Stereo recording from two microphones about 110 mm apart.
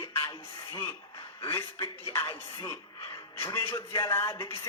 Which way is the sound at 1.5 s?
25° left (ahead or behind).